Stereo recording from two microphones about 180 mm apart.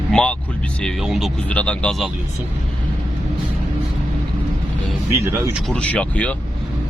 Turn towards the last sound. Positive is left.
turn(degrees=5)  # may be behind; listen again after turning